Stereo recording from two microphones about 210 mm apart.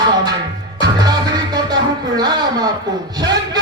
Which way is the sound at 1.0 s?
20° right (ahead or behind).